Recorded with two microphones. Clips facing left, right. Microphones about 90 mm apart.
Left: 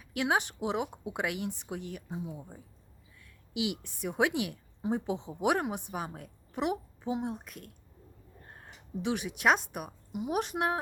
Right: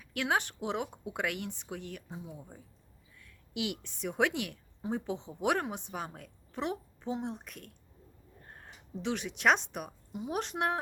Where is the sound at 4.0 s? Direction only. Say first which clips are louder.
Left 2 dB; 10° left (ahead or behind).